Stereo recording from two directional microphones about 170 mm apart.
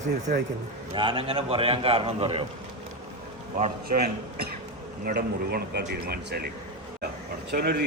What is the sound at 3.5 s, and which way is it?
Speech, 50° right (ahead or behind).